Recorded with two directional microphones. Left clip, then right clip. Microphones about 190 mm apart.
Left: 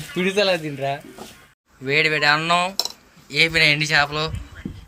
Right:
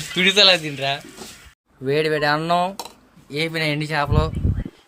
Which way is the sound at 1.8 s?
35° right (ahead or behind).